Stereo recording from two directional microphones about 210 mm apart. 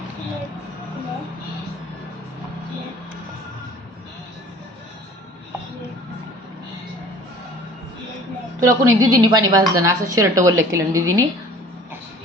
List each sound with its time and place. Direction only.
8.6 s speech: 15° right (ahead or behind)